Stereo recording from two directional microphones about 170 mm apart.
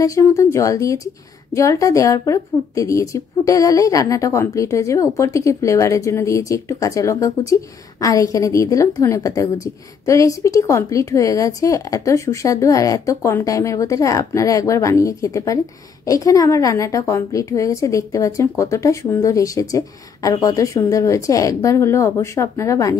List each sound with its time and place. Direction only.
0.0 s a woman's voice: 20° left (ahead or behind)